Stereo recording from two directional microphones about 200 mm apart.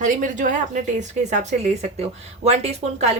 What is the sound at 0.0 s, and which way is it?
Speech, 40° right (ahead or behind).